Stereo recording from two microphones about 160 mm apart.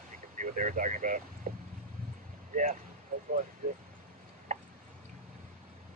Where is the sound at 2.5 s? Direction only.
55° right (ahead or behind).